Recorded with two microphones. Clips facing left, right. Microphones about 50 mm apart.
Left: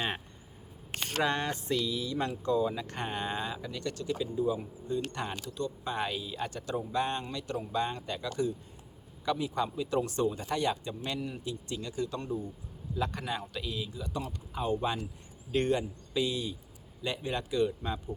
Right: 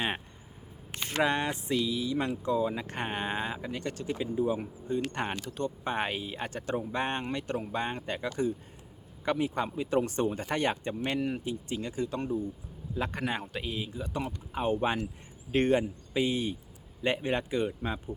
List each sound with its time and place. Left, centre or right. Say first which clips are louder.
1.2 s speech: right 3 dB; centre; by 11.3 s right
11.4 s speech: right 3 dB; right